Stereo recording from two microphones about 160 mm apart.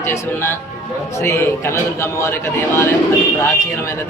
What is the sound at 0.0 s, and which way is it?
Speech, 15° left (ahead or behind).